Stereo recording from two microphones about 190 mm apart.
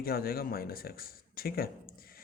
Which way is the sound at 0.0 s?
50° left (ahead or behind).